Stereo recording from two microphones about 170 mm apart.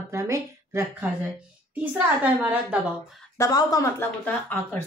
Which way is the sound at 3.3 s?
20° left (ahead or behind).